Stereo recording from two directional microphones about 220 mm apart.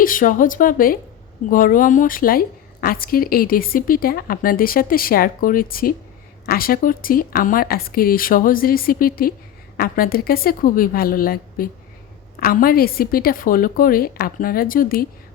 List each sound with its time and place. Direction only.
0.0 s a woman's voice: 40° left (ahead or behind)